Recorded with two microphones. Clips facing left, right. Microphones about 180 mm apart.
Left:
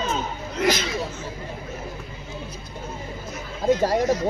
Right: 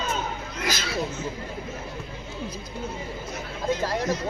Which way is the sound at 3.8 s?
45° left (ahead or behind).